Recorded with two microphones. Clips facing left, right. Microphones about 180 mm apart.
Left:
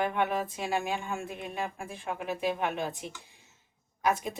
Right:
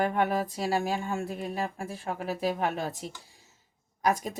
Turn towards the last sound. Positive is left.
turn(degrees=-40)  # may be behind; listen again after turning